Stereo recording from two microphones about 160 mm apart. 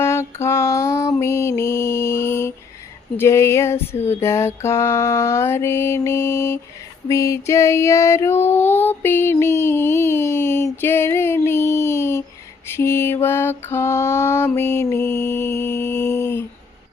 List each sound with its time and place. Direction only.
0.0 s mantra: 15° left (ahead or behind)
7.1 s female singing: 20° left (ahead or behind)
12.6 s mantra: 15° left (ahead or behind)